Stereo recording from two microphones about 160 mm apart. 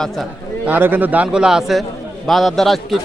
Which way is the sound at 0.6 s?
10° right (ahead or behind).